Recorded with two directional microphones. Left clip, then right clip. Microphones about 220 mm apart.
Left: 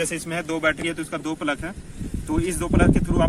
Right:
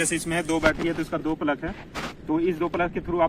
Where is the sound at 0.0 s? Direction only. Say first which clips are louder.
Right 1 dB; centre (ahead or behind).